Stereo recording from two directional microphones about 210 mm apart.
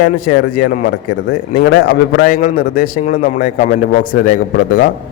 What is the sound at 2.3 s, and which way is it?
A man's voice, 40° left (ahead or behind).